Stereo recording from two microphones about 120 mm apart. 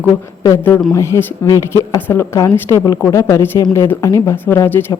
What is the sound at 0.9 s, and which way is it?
A woman's voice, 25° left (ahead or behind).